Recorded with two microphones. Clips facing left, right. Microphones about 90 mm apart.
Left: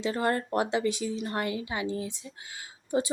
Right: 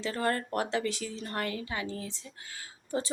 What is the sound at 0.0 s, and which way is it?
Speech, 20° left (ahead or behind).